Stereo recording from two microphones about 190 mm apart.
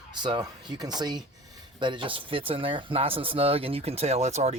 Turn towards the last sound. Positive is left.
turn(degrees=-35)  # may be behind; listen again after turning